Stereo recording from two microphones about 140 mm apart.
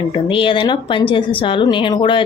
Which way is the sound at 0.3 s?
35° left (ahead or behind).